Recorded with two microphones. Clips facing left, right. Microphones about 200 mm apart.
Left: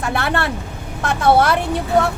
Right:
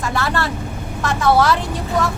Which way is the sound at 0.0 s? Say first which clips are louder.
Left 1 dB; 60° left (ahead or behind).